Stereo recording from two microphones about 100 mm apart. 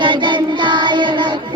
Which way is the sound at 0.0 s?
50° right (ahead or behind).